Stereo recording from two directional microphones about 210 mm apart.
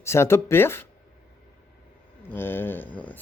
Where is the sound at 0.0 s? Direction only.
10° left (ahead or behind).